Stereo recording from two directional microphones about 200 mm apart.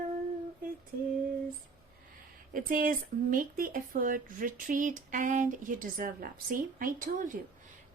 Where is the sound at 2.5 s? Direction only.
45° right (ahead or behind).